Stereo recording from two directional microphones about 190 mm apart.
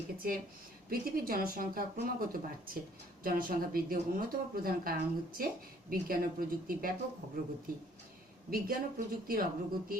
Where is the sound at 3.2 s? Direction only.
50° right (ahead or behind).